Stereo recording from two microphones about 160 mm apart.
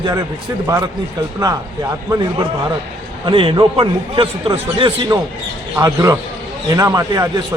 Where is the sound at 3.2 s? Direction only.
35° right (ahead or behind).